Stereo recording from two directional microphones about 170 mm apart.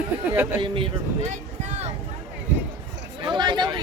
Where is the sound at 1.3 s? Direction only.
40° right (ahead or behind).